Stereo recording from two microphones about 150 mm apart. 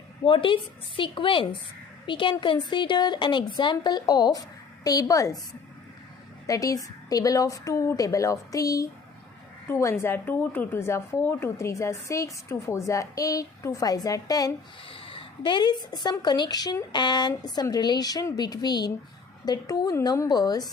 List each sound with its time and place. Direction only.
0.3 s a woman's voice: 35° left (ahead or behind)
6.5 s a woman's voice: 25° left (ahead or behind)
14.8 s a woman's voice: 35° left (ahead or behind)